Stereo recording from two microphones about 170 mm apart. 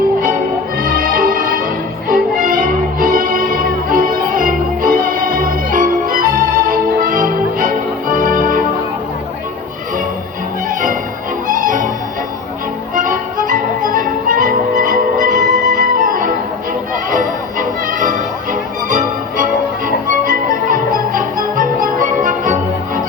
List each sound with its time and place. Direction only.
0.8 s music: 55° right (ahead or behind)
11.4 s music: 50° right (ahead or behind)
12.9 s music: 55° right (ahead or behind)